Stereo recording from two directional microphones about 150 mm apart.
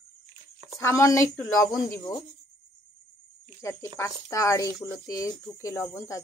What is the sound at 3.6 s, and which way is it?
Speech, 20° left (ahead or behind).